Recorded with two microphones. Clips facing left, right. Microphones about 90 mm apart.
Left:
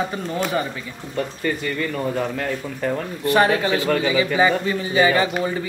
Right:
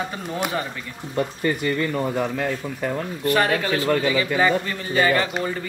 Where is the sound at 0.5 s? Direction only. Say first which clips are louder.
Left 3 dB; centre (ahead or behind).